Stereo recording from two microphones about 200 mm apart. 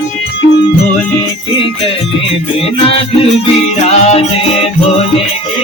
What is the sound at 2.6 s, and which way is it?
Music, 30° left (ahead or behind).